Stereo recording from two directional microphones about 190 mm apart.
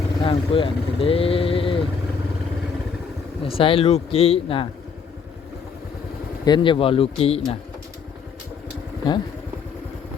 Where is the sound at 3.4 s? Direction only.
30° left (ahead or behind).